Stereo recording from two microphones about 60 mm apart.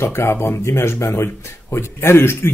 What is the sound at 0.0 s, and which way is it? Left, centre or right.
Speech, left.